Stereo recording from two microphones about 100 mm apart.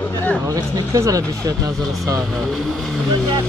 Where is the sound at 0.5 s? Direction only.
40° right (ahead or behind).